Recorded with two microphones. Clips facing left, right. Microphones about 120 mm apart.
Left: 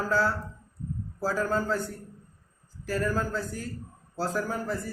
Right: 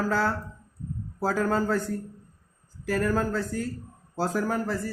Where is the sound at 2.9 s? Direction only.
65° right (ahead or behind).